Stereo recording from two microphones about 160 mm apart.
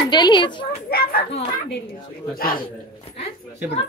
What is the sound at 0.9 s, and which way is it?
Speech, 70° left (ahead or behind).